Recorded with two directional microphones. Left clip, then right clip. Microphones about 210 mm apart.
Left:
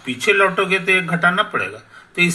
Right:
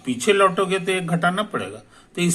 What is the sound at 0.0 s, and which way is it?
Speech, 15° right (ahead or behind).